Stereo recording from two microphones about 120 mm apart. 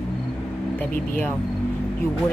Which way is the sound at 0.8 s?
15° left (ahead or behind).